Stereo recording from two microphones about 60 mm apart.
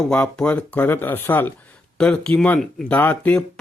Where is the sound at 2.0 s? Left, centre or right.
Centre.